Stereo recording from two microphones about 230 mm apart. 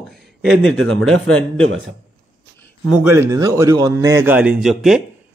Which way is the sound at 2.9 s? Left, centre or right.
Centre.